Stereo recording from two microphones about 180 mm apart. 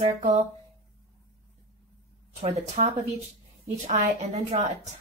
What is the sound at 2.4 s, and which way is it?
Speech, 35° right (ahead or behind).